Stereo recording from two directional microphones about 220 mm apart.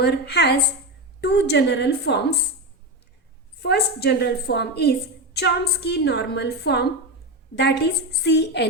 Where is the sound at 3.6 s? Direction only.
50° left (ahead or behind).